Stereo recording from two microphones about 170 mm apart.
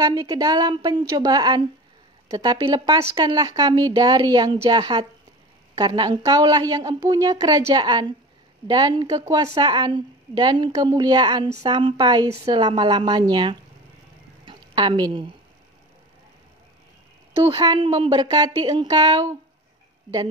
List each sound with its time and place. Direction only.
0.0 s speech: 20° right (ahead or behind)
14.4 s a sound: 30° right (ahead or behind)
17.5 s speech: 30° right (ahead or behind)